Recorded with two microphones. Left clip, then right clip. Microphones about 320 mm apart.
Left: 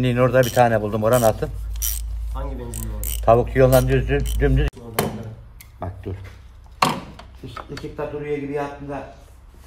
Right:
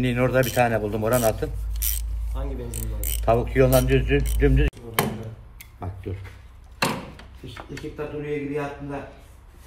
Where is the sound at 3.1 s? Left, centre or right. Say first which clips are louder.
Left 6 dB; left.